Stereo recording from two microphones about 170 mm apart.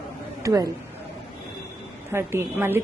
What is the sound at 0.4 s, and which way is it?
Speech, 20° right (ahead or behind).